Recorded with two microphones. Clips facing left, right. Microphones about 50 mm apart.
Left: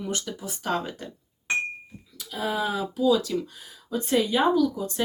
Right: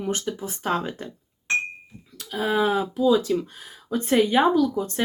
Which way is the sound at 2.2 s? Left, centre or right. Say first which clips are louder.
Right 5 dB; right.